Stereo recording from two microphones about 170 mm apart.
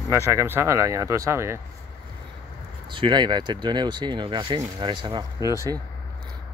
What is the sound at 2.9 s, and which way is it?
Speech, 25° right (ahead or behind).